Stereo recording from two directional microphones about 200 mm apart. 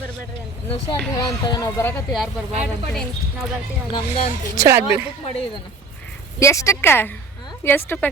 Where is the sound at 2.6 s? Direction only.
Centre (ahead or behind).